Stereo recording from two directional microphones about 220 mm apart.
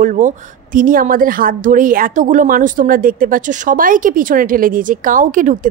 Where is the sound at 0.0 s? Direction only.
35° right (ahead or behind).